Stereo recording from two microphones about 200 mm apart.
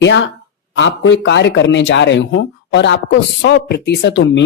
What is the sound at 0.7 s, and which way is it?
Speech, 65° left (ahead or behind).